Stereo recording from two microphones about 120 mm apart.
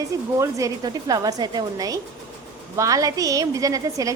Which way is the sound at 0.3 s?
25° right (ahead or behind).